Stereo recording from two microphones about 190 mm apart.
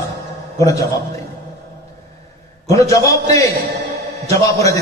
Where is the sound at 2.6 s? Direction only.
15° left (ahead or behind).